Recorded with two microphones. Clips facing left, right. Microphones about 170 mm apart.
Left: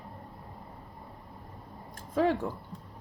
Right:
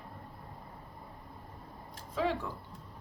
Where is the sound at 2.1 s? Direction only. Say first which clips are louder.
Left 6 dB; 50° left (ahead or behind).